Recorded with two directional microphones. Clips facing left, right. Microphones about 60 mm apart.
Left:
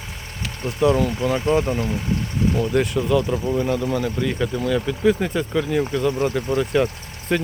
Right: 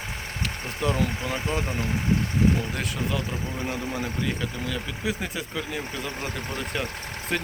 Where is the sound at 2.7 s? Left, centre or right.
Centre.